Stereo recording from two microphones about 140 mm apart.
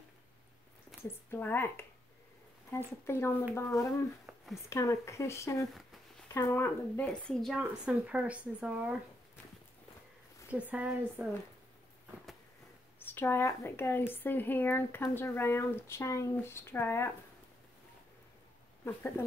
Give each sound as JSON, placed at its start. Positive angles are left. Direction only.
{"t": 0.9, "sound": "a sound", "side_deg": 0}
{"t": 1.3, "sound": "speech", "side_deg": 15}
{"t": 10.5, "sound": "speech", "side_deg": -10}
{"t": 13.0, "sound": "speech", "side_deg": 15}